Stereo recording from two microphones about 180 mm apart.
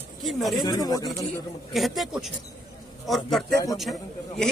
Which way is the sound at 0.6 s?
20° left (ahead or behind).